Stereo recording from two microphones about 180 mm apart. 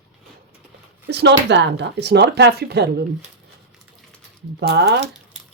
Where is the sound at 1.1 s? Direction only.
70° right (ahead or behind).